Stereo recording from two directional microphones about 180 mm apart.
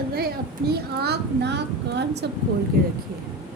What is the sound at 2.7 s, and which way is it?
Speech, 55° right (ahead or behind).